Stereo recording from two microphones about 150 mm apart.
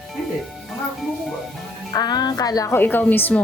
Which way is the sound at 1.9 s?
25° left (ahead or behind).